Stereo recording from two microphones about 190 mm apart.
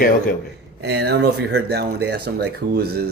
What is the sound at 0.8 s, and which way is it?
Speech, 60° right (ahead or behind).